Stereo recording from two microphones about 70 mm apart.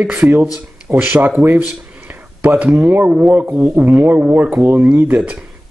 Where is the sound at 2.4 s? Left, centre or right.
Right.